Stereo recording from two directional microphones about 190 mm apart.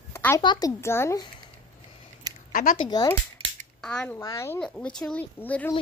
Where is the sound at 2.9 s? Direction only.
20° left (ahead or behind).